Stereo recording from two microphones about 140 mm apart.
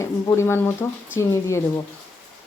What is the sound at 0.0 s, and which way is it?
A woman's voice, 15° left (ahead or behind).